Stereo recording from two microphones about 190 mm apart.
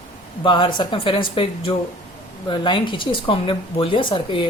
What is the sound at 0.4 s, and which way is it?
Speech, 25° left (ahead or behind).